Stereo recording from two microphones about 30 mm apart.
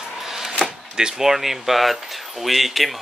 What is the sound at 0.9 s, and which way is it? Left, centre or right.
Speech, right.